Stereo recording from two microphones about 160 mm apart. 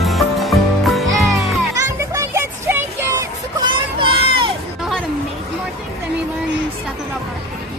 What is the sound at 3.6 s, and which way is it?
Music, 35° right (ahead or behind).